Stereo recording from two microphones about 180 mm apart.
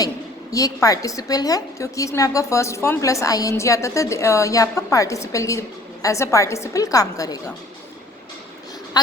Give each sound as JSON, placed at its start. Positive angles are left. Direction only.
{"t": 0.5, "sound": "a woman's voice", "side_deg": 20}